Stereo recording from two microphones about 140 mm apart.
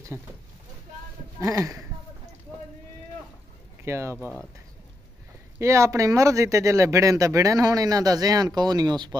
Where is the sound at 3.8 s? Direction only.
20° right (ahead or behind).